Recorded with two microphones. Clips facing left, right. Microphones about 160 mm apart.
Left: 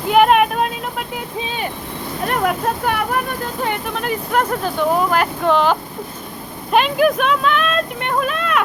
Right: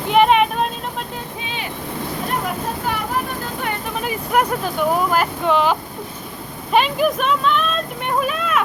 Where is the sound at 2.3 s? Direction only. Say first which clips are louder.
Left 8 dB; 65° left (ahead or behind).